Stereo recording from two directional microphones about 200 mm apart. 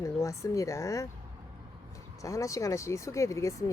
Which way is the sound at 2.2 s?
15° left (ahead or behind).